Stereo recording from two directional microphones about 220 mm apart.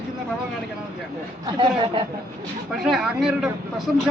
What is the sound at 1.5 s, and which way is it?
Speech, 25° right (ahead or behind).